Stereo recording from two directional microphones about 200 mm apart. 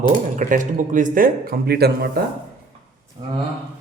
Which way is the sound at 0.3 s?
40° right (ahead or behind).